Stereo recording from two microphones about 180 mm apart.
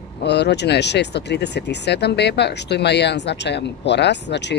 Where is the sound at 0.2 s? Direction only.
70° left (ahead or behind).